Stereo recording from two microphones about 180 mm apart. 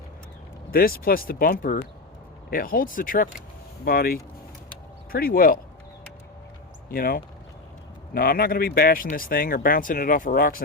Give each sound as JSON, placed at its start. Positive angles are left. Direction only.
{"t": 0.7, "sound": "speech", "side_deg": 55}
{"t": 6.9, "sound": "speech", "side_deg": 55}